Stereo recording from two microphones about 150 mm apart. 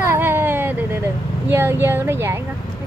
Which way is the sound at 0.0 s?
15° right (ahead or behind).